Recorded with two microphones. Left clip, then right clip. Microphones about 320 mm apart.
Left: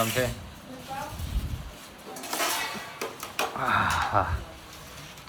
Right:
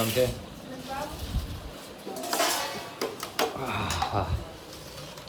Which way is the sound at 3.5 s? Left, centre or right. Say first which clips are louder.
Left 6 dB; centre.